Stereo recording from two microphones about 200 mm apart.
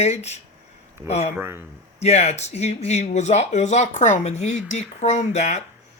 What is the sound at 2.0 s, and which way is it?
Speech, 35° left (ahead or behind).